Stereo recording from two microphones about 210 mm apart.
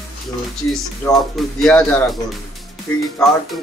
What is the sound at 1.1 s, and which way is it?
Speech, centre (ahead or behind).